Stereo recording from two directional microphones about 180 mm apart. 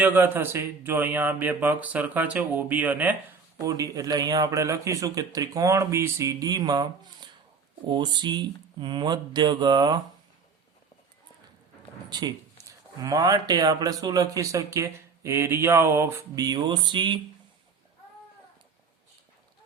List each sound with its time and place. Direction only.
0.0 s speech: 10° right (ahead or behind)
12.0 s speech: 20° right (ahead or behind)